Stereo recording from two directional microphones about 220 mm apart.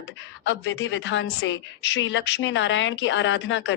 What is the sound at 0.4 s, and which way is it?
A woman's voice, 55° left (ahead or behind).